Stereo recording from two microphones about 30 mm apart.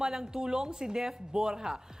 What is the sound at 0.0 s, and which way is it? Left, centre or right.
Speech, centre.